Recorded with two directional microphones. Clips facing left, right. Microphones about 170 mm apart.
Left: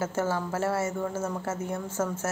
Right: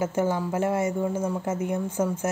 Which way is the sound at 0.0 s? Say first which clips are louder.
Right 3 dB; 15° right (ahead or behind).